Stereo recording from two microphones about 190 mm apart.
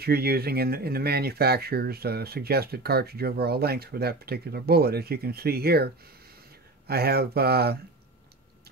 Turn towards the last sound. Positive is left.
turn(degrees=-55)  # may be behind; listen again after turning